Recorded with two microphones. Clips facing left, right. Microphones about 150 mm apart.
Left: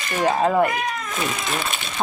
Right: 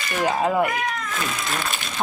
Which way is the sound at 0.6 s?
20° left (ahead or behind).